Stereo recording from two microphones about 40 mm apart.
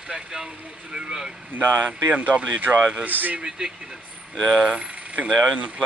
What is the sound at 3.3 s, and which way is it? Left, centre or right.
Speech, right.